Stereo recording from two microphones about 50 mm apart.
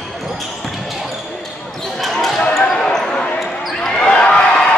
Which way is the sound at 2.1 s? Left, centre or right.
Centre.